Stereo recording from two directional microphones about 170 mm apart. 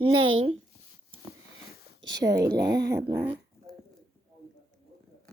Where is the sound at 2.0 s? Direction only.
90° right.